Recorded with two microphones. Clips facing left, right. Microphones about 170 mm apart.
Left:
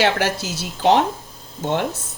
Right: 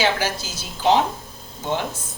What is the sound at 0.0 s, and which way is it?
A woman's voice, 70° left (ahead or behind).